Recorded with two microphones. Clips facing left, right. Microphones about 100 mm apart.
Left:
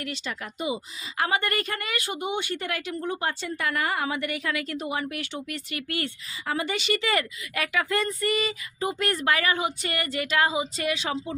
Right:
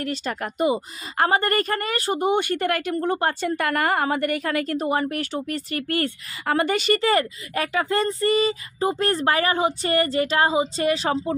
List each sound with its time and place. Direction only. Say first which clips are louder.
0.0 s a woman's voice: right 7 dB; 45° right (ahead or behind)
6.3 s speech: right 7 dB; 60° right (ahead or behind); by 11.3 s 40° right (ahead or behind)